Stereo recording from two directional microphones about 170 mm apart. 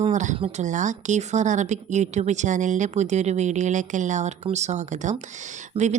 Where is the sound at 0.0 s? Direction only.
45° right (ahead or behind).